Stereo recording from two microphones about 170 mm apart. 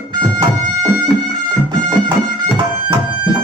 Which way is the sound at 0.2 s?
25° right (ahead or behind).